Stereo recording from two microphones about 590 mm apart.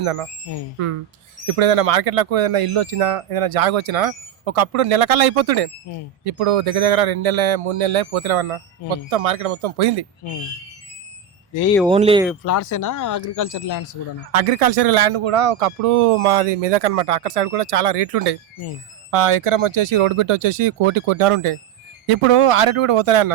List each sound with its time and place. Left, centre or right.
0.0 s speech: right
1.5 s speech: right
11.9 s speech: centre
12.5 s speech: left
14.3 s speech: right
19.1 s speech: right